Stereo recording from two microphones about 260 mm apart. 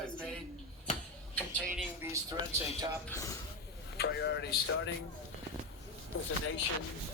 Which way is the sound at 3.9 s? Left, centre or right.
Left.